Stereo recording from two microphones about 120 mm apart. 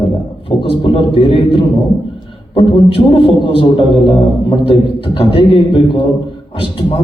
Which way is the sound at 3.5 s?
45° left (ahead or behind).